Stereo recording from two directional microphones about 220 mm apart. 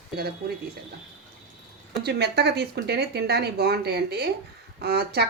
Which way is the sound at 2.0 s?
50° right (ahead or behind).